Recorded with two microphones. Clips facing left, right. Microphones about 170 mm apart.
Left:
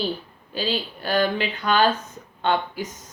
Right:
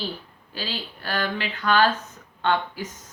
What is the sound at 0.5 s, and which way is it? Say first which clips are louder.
Speech: left 7 dB; 20° left (ahead or behind).